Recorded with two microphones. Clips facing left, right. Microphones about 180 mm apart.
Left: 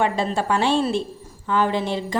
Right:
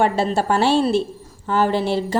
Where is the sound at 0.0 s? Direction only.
40° right (ahead or behind).